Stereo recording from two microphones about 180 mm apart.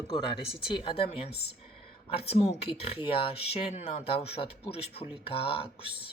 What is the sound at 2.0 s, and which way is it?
Speech, 35° left (ahead or behind).